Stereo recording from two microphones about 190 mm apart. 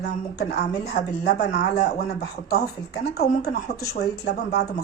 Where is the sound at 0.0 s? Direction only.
60° left (ahead or behind).